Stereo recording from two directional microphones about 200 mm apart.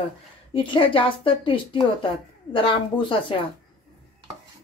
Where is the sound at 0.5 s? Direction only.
25° left (ahead or behind).